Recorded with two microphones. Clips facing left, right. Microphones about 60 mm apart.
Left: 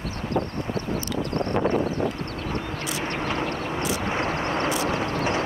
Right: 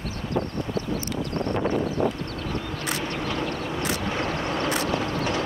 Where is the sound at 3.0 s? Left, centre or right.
Left.